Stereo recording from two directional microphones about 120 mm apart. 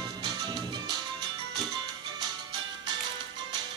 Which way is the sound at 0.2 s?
35° right (ahead or behind).